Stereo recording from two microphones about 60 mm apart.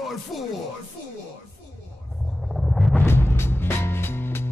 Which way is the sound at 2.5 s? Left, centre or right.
Centre.